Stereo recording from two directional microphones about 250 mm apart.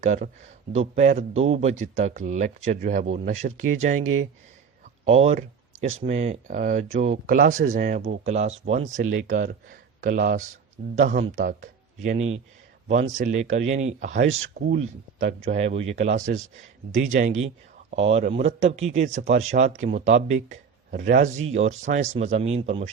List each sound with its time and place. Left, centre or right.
0.0 s speech: right
5.0 s speech: right